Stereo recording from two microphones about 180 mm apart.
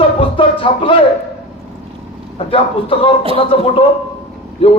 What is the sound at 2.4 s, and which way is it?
Speech, 30° left (ahead or behind).